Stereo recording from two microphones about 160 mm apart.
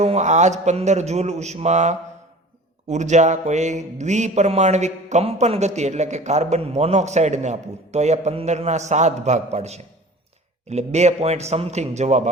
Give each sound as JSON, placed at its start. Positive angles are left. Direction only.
{"t": 0.0, "sound": "a man's voice", "side_deg": -45}